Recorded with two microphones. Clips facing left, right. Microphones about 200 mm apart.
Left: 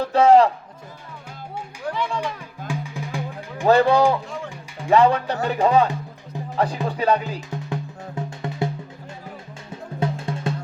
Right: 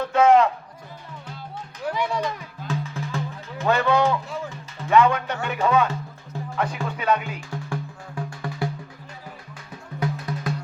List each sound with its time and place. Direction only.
0.0 s speech: 35° left (ahead or behind)
1.9 s speech: 10° right (ahead or behind)
2.6 s music: 15° left (ahead or behind)
3.7 s speech: 35° left (ahead or behind)
6.3 s music: 15° left (ahead or behind)
6.8 s speech: 35° left (ahead or behind)
7.5 s music: 20° left (ahead or behind)
10.0 s music: 25° left (ahead or behind)